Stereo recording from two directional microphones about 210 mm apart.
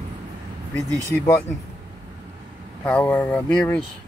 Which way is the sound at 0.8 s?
15° right (ahead or behind).